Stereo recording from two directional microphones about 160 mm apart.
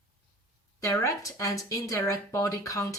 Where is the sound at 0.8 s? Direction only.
20° left (ahead or behind).